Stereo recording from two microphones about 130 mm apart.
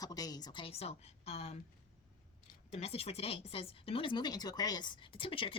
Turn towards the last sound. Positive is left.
turn(degrees=45)  # may be behind; listen again after turning